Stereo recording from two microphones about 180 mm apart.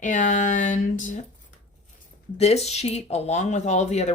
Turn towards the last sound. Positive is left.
turn(degrees=40)  # may be behind; listen again after turning